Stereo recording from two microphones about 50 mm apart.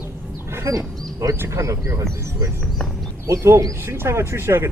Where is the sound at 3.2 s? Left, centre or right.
Right.